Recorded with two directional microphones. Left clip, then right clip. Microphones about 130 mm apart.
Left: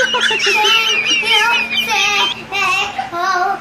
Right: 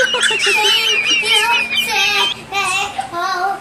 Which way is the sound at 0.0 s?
Centre (ahead or behind).